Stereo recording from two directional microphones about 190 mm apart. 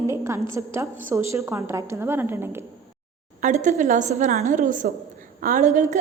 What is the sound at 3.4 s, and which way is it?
A woman's voice, 40° right (ahead or behind).